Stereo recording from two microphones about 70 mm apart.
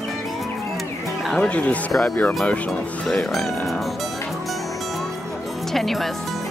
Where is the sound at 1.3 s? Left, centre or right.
Centre.